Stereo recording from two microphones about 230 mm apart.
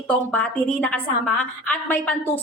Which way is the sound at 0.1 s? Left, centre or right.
Centre.